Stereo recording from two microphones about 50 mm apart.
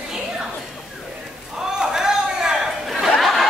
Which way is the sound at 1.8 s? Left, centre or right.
Centre.